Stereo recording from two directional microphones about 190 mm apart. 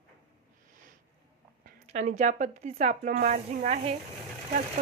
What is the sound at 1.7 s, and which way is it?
Speech, 40° right (ahead or behind).